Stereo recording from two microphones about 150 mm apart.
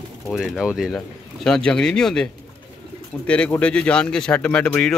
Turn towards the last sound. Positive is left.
turn(degrees=5)  # may be behind; listen again after turning